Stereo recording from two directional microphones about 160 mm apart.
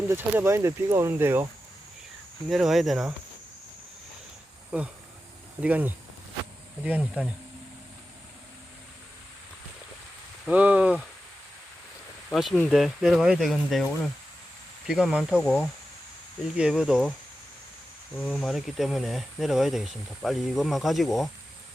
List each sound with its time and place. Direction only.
0.1 s speech: 15° right (ahead or behind)
2.5 s speech: centre (ahead or behind)
5.5 s speech: 10° right (ahead or behind)
10.4 s speech: 10° right (ahead or behind)
12.3 s speech: centre (ahead or behind)
14.8 s speech: 5° right (ahead or behind)
18.3 s speech: centre (ahead or behind)